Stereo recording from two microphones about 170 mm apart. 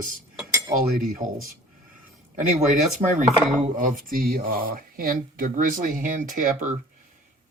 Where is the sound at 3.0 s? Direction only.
40° right (ahead or behind).